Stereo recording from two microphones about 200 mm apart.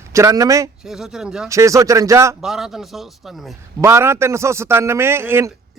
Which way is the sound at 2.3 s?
Centre (ahead or behind).